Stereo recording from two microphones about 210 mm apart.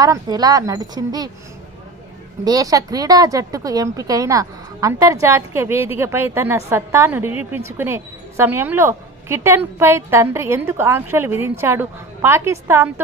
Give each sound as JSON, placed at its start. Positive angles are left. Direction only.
{"t": 0.0, "sound": "speech", "side_deg": -20}
{"t": 2.4, "sound": "speech", "side_deg": -15}